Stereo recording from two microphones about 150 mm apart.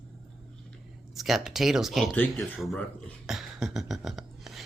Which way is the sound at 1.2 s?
Centre (ahead or behind).